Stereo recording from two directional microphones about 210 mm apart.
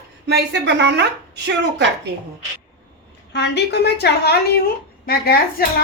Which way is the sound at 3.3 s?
55° left (ahead or behind).